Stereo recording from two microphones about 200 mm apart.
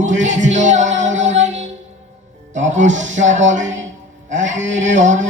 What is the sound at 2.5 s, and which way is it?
Speech, 35° right (ahead or behind).